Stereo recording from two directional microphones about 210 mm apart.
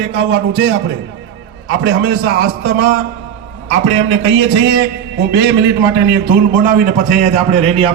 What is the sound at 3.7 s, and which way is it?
Speech, 30° right (ahead or behind).